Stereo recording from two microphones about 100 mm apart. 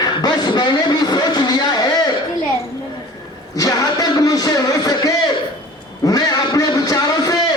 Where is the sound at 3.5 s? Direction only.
35° left (ahead or behind).